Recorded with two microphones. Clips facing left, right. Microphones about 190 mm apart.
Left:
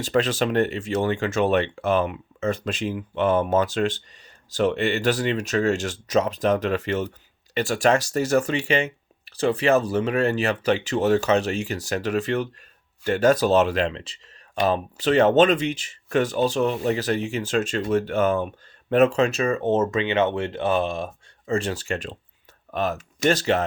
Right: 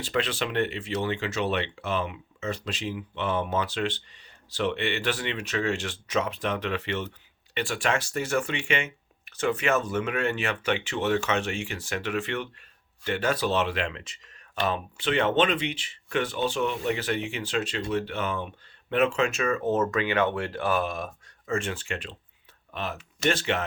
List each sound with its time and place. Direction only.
0.0 s speech: 45° left (ahead or behind)